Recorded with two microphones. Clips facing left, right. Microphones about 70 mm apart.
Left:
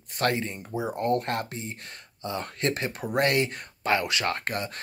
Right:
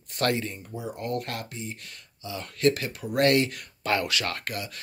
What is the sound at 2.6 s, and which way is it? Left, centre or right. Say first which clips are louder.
Speech: right 6 dB; left.